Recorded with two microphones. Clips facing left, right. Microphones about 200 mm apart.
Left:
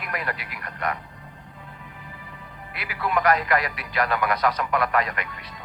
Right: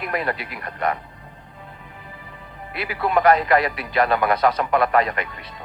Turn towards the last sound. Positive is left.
turn(degrees=-30)  # may be behind; listen again after turning